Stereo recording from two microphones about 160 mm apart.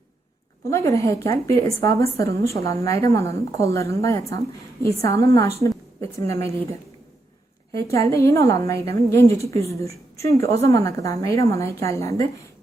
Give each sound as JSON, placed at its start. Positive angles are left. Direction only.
{"t": 0.7, "sound": "a woman's voice", "side_deg": 20}
{"t": 7.7, "sound": "a woman's voice", "side_deg": 20}